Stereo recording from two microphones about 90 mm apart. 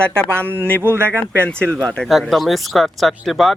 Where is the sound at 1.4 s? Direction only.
15° left (ahead or behind).